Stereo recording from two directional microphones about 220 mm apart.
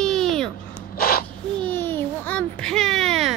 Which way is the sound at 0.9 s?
45° left (ahead or behind).